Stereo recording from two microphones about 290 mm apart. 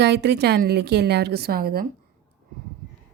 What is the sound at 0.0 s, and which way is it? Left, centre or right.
A woman's voice, right.